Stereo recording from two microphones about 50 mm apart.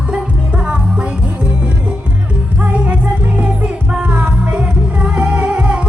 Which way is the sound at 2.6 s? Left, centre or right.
Right.